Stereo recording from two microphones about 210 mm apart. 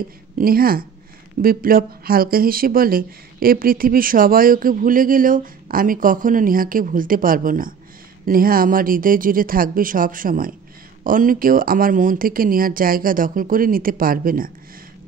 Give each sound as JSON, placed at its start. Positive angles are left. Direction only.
{"t": 0.4, "sound": "speech", "side_deg": -45}